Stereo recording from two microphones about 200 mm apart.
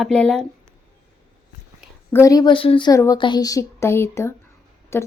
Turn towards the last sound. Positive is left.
turn(degrees=10)  # may be behind; listen again after turning